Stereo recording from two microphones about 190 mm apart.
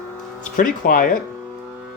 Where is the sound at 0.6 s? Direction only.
45° left (ahead or behind).